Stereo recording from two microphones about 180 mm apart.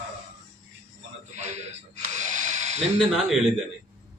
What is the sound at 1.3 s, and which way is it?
Speech, 40° right (ahead or behind).